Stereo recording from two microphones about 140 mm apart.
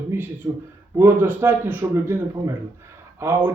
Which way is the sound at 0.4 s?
25° right (ahead or behind).